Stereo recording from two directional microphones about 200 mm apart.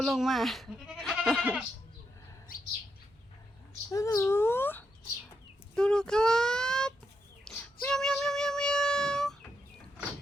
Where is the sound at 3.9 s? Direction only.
15° left (ahead or behind).